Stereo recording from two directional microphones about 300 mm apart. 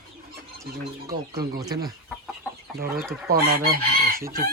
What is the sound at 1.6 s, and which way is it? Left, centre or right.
Speech, centre.